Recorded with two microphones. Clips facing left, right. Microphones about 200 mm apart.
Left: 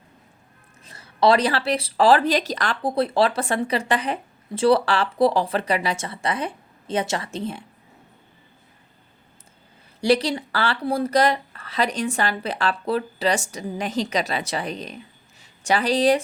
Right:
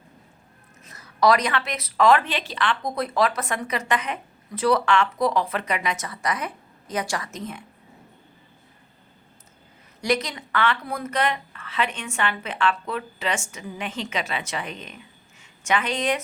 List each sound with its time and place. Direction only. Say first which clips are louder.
0.9 s speech: left 2 dB; 30° left (ahead or behind)
10.0 s speech: left 5 dB; 30° left (ahead or behind)